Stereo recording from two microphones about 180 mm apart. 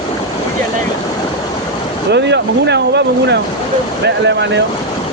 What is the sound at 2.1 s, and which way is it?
Vehicle, 70° right (ahead or behind).